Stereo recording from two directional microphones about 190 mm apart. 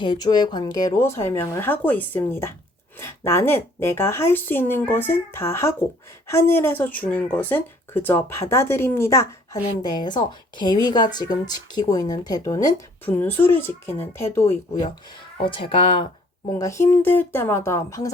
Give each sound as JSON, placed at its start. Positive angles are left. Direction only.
{"t": 0.0, "sound": "speech", "side_deg": 20}
{"t": 15.4, "sound": "speech", "side_deg": 25}
{"t": 16.5, "sound": "speech", "side_deg": 15}